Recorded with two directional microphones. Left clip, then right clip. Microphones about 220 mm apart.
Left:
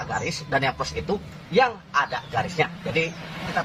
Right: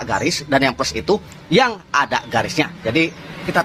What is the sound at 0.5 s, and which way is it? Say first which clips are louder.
A man's voice: right 6 dB; 50° right (ahead or behind).